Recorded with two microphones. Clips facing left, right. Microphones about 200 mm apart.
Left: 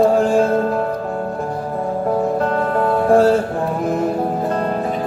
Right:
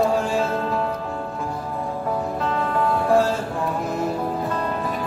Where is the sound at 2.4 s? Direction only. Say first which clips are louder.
Left 5 dB; 50° left (ahead or behind).